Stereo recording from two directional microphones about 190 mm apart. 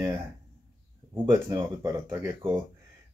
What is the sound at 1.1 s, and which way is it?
Speech, 20° right (ahead or behind).